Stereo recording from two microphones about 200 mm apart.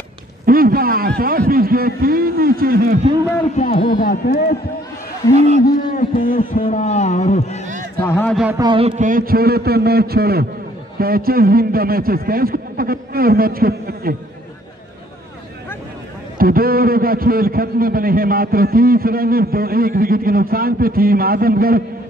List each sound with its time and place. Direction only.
0.5 s a man's voice: 45° right (ahead or behind)
3.8 s speech: 45° left (ahead or behind)
5.8 s a man's voice: 40° left (ahead or behind)
7.6 s a sound: 40° right (ahead or behind)
8.0 s a man's voice: 10° left (ahead or behind)
8.5 s a man's voice: 25° right (ahead or behind); by 14.1 s 50° right (ahead or behind)
16.3 s a man's voice: 45° right (ahead or behind)